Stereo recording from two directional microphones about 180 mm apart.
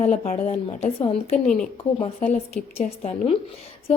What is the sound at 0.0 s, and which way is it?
A woman's voice, 35° left (ahead or behind).